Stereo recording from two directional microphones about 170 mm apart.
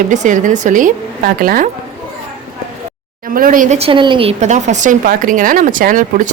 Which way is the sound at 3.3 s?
55° right (ahead or behind).